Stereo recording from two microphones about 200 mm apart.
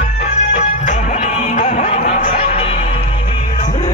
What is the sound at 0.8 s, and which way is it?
Music, 35° left (ahead or behind).